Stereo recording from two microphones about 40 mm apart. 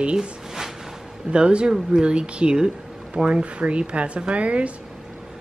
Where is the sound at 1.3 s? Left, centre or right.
Right.